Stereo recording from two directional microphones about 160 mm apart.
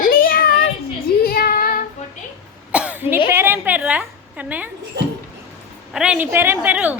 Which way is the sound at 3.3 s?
15° right (ahead or behind).